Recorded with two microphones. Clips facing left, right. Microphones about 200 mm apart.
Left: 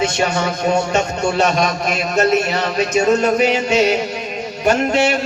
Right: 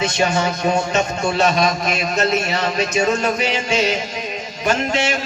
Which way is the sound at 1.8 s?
40° left (ahead or behind).